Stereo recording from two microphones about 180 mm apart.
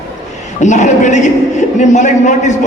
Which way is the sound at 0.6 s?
40° left (ahead or behind).